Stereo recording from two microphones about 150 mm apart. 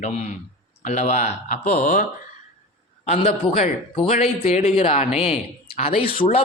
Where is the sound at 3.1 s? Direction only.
45° left (ahead or behind).